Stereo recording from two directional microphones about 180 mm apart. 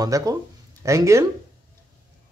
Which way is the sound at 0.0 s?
20° right (ahead or behind).